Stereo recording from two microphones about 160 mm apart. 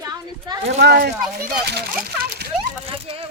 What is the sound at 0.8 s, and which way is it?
Speech, 90° right.